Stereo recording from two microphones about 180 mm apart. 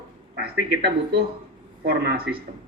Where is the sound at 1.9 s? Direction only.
55° right (ahead or behind).